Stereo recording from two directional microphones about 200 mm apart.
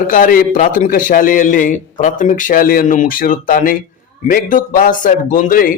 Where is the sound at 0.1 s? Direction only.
45° left (ahead or behind).